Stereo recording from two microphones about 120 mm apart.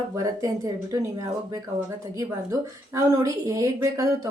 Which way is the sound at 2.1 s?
25° right (ahead or behind).